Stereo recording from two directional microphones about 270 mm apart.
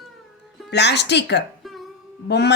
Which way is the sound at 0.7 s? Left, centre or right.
Left.